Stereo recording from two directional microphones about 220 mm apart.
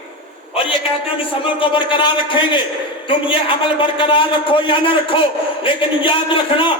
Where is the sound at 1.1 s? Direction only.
25° left (ahead or behind).